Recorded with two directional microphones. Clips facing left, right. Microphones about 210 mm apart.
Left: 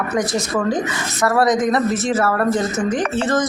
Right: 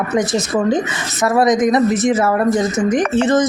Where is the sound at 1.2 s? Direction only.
20° right (ahead or behind).